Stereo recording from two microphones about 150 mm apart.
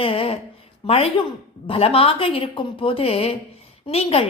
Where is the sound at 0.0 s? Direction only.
40° left (ahead or behind).